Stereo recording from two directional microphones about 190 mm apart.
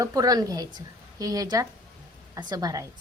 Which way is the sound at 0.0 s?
20° right (ahead or behind).